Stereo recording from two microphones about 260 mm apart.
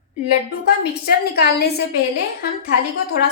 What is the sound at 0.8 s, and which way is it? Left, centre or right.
A woman's voice, left.